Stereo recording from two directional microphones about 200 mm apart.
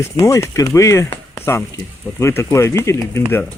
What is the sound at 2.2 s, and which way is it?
Speech, 15° left (ahead or behind).